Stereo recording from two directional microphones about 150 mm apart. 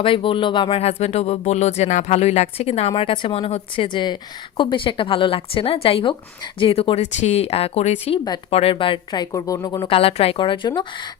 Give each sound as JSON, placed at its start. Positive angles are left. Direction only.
{"t": 0.0, "sound": "speech", "side_deg": 35}
{"t": 9.8, "sound": "speech", "side_deg": 40}